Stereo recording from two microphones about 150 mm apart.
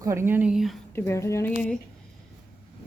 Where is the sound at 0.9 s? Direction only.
15° left (ahead or behind).